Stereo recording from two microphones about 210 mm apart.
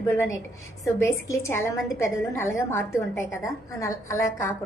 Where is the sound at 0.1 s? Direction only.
10° left (ahead or behind).